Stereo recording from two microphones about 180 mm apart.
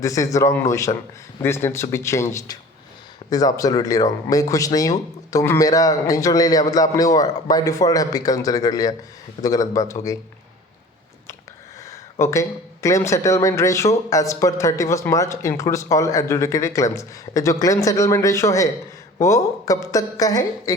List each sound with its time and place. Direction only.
0.0 s speech: 20° left (ahead or behind)
12.2 s speech: 15° left (ahead or behind)